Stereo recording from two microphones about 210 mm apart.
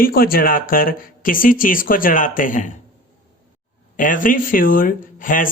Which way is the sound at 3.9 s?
40° left (ahead or behind).